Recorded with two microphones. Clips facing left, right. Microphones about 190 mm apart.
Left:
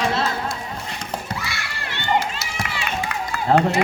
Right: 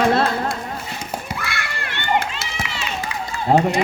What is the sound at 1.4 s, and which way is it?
Crowd, 55° right (ahead or behind).